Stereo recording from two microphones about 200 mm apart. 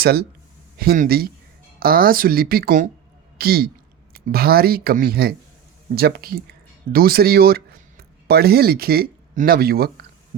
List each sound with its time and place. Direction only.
0.0 s speech: 50° right (ahead or behind)